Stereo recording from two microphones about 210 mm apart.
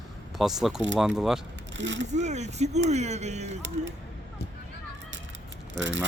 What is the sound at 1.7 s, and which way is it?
Speech, 60° right (ahead or behind).